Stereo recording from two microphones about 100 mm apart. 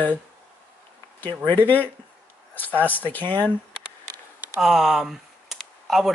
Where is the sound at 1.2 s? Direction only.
20° left (ahead or behind).